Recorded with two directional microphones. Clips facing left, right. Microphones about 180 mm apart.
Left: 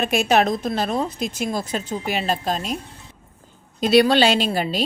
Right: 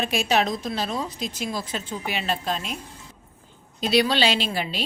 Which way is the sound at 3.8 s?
50° left (ahead or behind).